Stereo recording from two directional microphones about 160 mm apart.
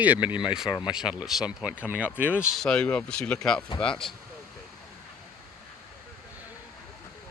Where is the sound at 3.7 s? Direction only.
30° left (ahead or behind).